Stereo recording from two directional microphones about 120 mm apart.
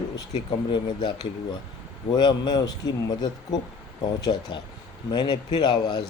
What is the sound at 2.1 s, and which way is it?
Speech, 35° left (ahead or behind).